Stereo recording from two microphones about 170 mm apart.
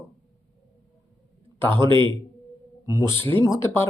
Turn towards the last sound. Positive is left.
turn(degrees=15)  # may be behind; listen again after turning